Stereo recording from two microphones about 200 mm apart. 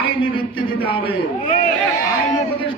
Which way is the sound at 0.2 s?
25° left (ahead or behind).